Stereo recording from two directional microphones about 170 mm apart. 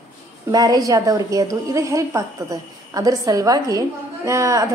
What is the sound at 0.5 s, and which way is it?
A woman's voice, 20° right (ahead or behind).